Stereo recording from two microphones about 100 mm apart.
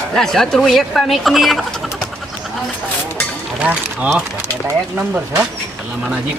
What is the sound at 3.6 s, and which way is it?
Speech, 10° right (ahead or behind).